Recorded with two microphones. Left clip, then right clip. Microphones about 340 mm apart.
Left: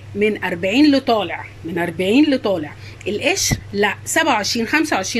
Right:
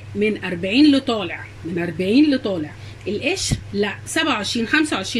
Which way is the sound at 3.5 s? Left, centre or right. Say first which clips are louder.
Left 4 dB; centre.